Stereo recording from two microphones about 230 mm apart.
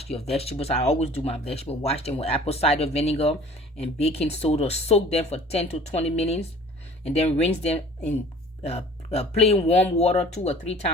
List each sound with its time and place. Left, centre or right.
0.3 s speech: left